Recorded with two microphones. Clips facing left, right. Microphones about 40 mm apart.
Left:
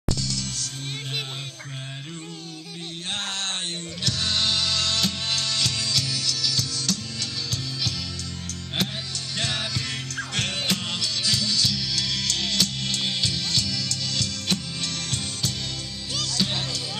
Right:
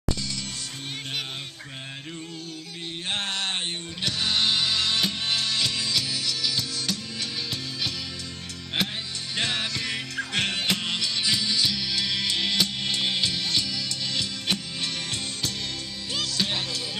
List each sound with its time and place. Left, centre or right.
0.1 s music: centre
4.0 s music: centre
9.4 s music: centre